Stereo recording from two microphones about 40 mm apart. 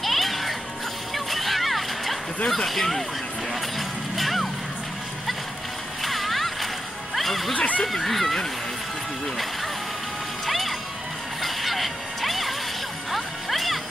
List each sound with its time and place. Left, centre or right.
0.0 s music: centre
1.1 s a sound: centre
2.5 s speech: centre
3.7 s music: centre
6.0 s splash: centre
7.2 s music: centre
7.5 s speech: left
7.8 s speech: centre
10.4 s music: centre